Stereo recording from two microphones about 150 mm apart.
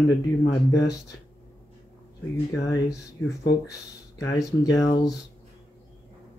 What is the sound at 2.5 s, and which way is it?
Speech, 20° left (ahead or behind).